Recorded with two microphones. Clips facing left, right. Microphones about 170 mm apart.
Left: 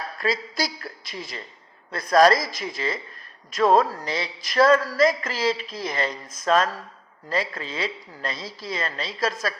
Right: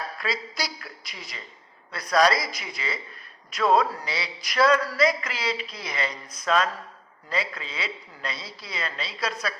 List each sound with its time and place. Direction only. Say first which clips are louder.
0.8 s a woman's voice: left 7 dB; 40° left (ahead or behind)